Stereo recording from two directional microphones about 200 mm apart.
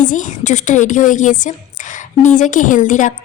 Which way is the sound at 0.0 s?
40° left (ahead or behind).